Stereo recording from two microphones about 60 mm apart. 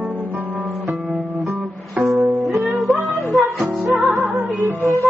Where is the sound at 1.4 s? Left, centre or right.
Centre.